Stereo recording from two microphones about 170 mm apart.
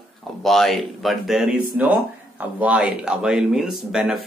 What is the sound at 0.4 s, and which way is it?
Speech, centre (ahead or behind).